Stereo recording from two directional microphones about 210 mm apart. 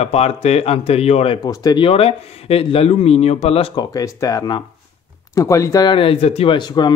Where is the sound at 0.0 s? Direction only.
30° left (ahead or behind).